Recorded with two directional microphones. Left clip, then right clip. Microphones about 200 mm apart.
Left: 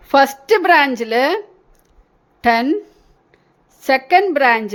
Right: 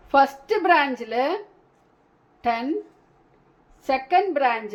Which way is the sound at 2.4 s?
50° left (ahead or behind).